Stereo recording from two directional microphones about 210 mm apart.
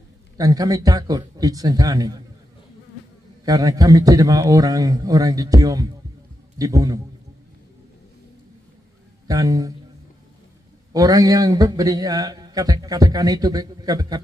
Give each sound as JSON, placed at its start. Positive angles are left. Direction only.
{"t": 0.4, "sound": "a man's voice", "side_deg": -15}
{"t": 3.4, "sound": "a man's voice", "side_deg": -15}
{"t": 9.3, "sound": "a man's voice", "side_deg": -15}
{"t": 10.9, "sound": "a man's voice", "side_deg": -15}